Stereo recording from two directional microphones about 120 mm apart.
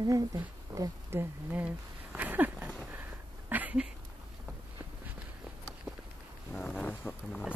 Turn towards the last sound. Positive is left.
turn(degrees=15)  # may be behind; listen again after turning